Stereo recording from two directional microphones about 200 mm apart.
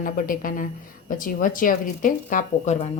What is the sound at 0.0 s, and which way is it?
A woman's voice, 45° left (ahead or behind).